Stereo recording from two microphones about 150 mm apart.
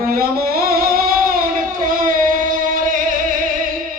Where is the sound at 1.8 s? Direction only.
60° right (ahead or behind).